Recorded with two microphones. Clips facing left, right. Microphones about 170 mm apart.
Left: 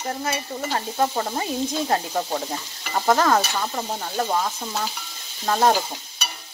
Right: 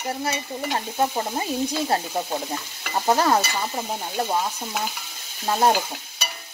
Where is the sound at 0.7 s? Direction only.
15° right (ahead or behind).